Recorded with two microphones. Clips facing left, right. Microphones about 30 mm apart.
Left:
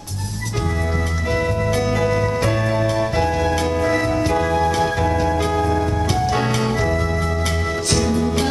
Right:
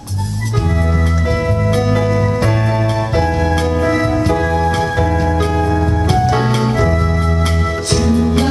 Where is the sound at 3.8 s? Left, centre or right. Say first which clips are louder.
Right 3 dB; centre.